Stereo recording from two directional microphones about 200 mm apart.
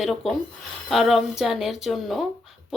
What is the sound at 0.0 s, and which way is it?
Speech, centre (ahead or behind).